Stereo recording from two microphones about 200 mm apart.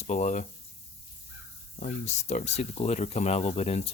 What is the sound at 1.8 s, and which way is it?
Speech, 35° left (ahead or behind).